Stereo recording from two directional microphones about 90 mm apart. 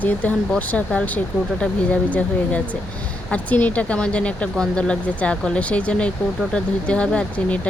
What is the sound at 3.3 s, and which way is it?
Speech, 15° left (ahead or behind).